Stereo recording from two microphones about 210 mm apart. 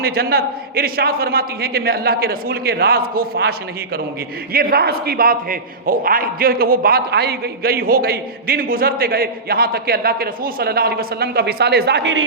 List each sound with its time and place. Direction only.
0.0 s a man's voice: 45° right (ahead or behind)
4.5 s a man's voice: 45° right (ahead or behind)